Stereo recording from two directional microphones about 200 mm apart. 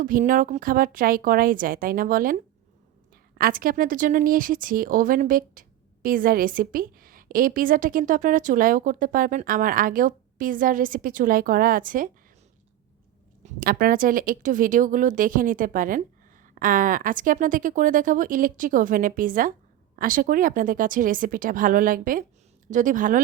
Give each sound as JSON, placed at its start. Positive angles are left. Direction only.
{"t": 0.0, "sound": "speech", "side_deg": -40}
{"t": 13.4, "sound": "speech", "side_deg": -45}